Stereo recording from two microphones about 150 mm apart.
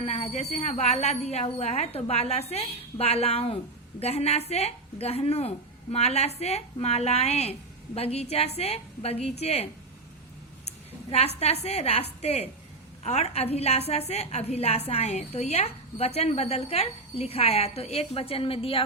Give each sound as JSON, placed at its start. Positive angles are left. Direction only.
{"t": 0.0, "sound": "a woman's voice", "side_deg": 45}
{"t": 11.3, "sound": "a woman's voice", "side_deg": 45}